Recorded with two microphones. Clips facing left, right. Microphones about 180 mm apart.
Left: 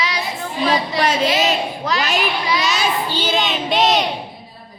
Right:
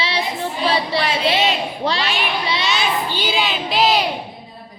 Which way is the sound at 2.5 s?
30° right (ahead or behind).